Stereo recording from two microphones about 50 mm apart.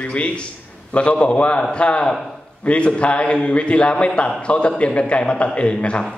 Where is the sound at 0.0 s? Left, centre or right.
Left.